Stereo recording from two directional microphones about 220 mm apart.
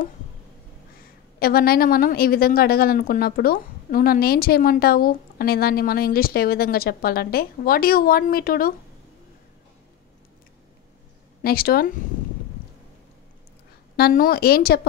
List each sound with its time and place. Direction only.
1.4 s a woman's voice: 45° left (ahead or behind)
11.4 s a woman's voice: 45° left (ahead or behind)
13.9 s a woman's voice: 40° left (ahead or behind)